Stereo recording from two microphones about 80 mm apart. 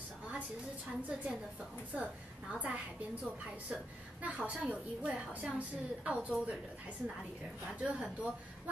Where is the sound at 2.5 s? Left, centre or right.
Centre.